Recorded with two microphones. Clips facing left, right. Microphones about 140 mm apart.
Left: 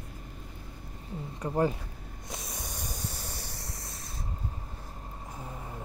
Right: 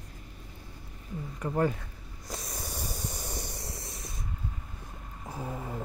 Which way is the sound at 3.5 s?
25° right (ahead or behind).